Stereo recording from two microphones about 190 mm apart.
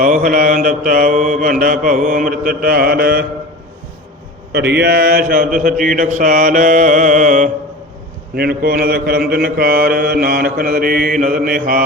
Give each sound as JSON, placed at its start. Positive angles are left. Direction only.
{"t": 0.0, "sound": "mantra", "side_deg": -45}
{"t": 4.5, "sound": "mantra", "side_deg": -60}
{"t": 8.4, "sound": "mantra", "side_deg": -55}